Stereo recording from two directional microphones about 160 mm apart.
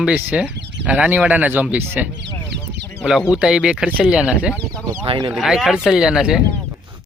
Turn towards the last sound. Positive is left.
turn(degrees=-5)  # may be behind; listen again after turning